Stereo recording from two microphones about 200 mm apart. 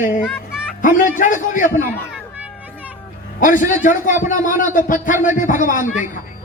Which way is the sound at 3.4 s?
40° left (ahead or behind).